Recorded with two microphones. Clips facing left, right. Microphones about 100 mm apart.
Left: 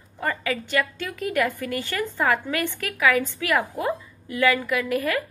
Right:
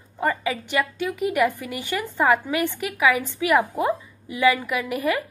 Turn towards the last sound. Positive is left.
turn(degrees=-15)  # may be behind; listen again after turning